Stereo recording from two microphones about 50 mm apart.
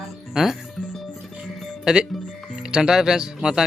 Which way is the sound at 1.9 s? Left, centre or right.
Centre.